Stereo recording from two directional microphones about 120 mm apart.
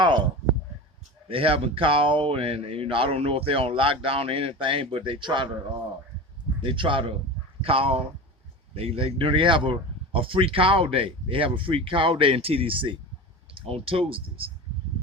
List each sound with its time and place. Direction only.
1.3 s speech: 50° right (ahead or behind)
6.6 s speech: 45° right (ahead or behind)